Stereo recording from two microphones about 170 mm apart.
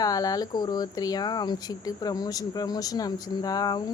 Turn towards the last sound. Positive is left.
turn(degrees=25)  # may be behind; listen again after turning